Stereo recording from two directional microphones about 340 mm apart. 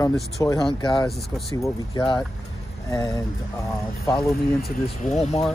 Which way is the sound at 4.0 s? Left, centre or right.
Centre.